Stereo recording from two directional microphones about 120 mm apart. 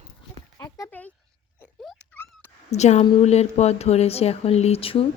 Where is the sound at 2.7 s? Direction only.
70° left (ahead or behind); by 5.0 s 50° left (ahead or behind).